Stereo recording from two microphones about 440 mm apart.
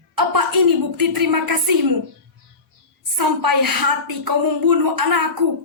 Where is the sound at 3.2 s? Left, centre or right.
Right.